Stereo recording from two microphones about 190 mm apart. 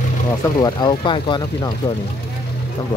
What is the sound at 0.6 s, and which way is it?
Speech, 25° left (ahead or behind).